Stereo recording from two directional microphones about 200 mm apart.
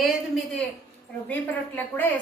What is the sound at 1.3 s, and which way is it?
Speech, 10° left (ahead or behind).